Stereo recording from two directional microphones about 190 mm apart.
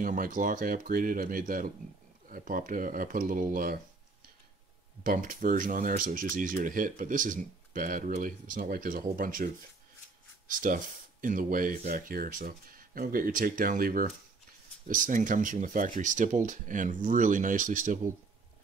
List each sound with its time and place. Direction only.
0.0 s speech: 45° right (ahead or behind)
5.0 s speech: 45° right (ahead or behind)
10.5 s speech: 45° right (ahead or behind)